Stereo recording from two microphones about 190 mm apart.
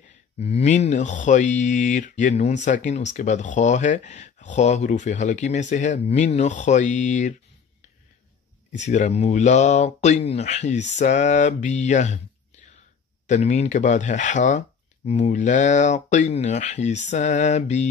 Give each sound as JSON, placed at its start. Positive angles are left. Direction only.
{"t": 0.4, "sound": "speech", "side_deg": 35}
{"t": 8.7, "sound": "speech", "side_deg": 40}
{"t": 13.3, "sound": "speech", "side_deg": 35}